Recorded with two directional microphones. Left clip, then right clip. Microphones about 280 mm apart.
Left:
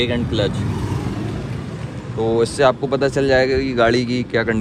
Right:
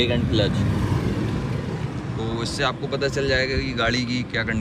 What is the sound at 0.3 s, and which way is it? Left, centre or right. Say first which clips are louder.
Speech: left 2 dB; left.